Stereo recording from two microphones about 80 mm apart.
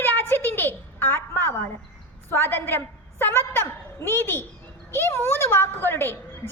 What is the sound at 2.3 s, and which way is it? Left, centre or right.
A woman's voice, left.